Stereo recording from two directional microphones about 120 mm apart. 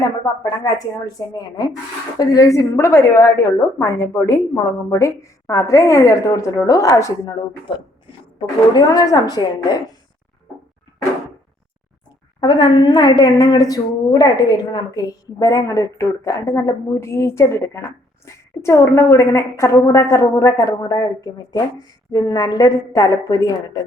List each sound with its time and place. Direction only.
0.0 s a woman's voice: 30° left (ahead or behind)
8.4 s a woman's voice: 30° left (ahead or behind)
12.4 s a woman's voice: 40° left (ahead or behind)